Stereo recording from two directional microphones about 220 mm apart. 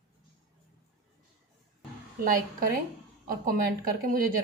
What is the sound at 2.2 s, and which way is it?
Speech, 40° right (ahead or behind).